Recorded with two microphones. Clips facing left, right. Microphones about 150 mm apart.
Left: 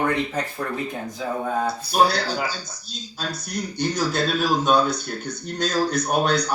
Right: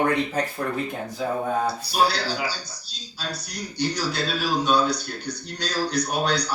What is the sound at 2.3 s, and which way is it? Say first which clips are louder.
A man's voice: left 2 dB; 45° left (ahead or behind).